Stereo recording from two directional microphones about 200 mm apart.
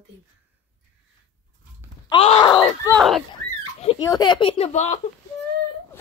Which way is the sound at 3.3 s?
25° left (ahead or behind).